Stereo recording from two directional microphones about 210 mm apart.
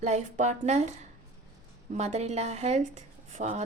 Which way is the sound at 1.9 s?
30° right (ahead or behind).